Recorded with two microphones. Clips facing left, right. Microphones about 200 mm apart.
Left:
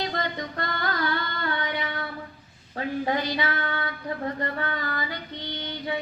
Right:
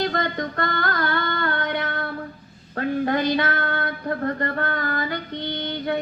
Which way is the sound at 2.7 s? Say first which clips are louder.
Right 4 dB; 55° right (ahead or behind).